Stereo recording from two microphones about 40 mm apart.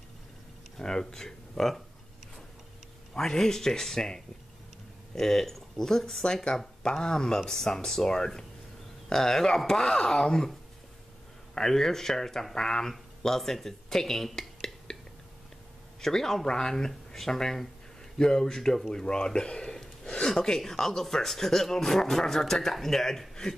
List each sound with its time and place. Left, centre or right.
0.7 s speech: centre
3.2 s speech: centre
11.5 s speech: centre
16.0 s speech: centre